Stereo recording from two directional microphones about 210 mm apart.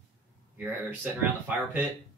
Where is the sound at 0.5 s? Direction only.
10° right (ahead or behind).